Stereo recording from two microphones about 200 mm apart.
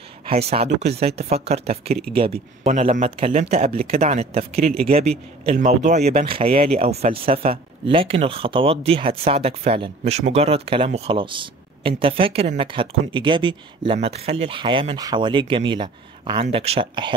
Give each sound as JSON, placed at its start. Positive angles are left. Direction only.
{"t": 0.3, "sound": "speech", "side_deg": -30}